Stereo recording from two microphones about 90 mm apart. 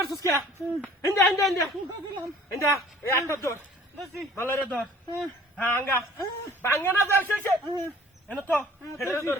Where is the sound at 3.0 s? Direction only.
30° left (ahead or behind).